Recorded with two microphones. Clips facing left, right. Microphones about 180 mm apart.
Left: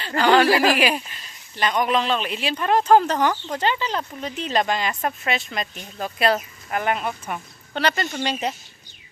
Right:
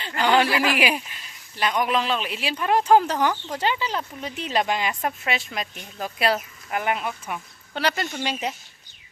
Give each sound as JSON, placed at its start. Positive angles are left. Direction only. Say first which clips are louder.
{"t": 0.4, "sound": "speech", "louder": "left 5 dB", "side_deg": 40}
{"t": 0.8, "sound": "speech", "louder": "left 2 dB", "side_deg": -10}